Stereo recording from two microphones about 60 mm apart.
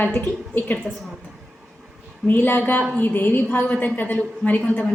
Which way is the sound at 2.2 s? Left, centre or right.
Left.